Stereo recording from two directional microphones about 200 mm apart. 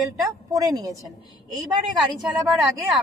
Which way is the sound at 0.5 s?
15° right (ahead or behind).